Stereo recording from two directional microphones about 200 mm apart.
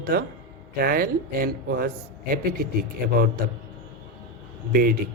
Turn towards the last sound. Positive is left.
turn(degrees=-45)  # may be behind; listen again after turning